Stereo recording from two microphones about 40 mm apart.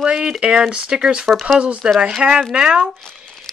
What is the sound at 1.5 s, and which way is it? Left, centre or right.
Speech, right.